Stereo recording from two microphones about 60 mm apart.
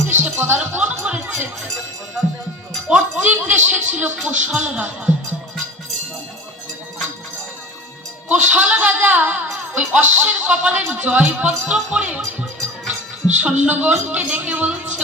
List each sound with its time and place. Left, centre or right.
0.2 s speech: right
0.8 s speech: right
2.9 s speech: right
8.3 s speech: right